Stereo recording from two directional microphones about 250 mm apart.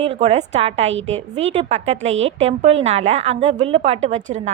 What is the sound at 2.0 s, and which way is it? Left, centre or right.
Speech, right.